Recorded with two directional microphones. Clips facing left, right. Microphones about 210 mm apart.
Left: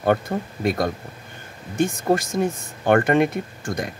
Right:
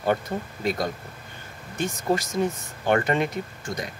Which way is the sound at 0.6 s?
55° left (ahead or behind).